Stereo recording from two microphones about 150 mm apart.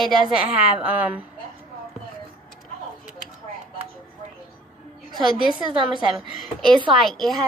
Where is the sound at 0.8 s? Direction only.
10° right (ahead or behind).